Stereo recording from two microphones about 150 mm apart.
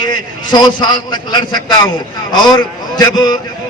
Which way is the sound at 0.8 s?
30° left (ahead or behind).